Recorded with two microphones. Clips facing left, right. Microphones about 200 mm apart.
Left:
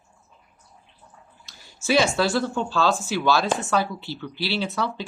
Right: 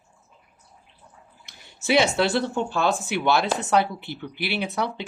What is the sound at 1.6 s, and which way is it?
Bathtub, 65° right (ahead or behind).